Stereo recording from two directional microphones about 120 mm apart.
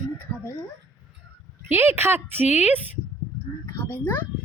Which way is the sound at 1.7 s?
20° right (ahead or behind).